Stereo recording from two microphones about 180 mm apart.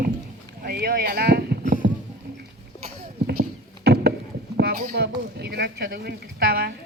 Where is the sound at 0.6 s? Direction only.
60° right (ahead or behind).